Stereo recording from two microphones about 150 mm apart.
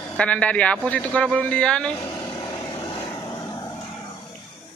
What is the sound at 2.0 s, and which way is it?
Vehicle, 25° left (ahead or behind).